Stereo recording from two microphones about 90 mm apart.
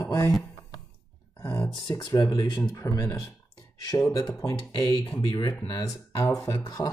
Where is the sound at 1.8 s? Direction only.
50° left (ahead or behind).